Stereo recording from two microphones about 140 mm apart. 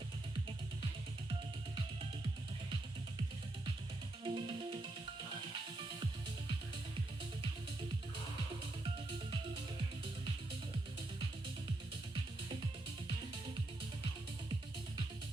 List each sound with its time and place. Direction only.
4.2 s music: 35° right (ahead or behind)
8.8 s music: 35° right (ahead or behind)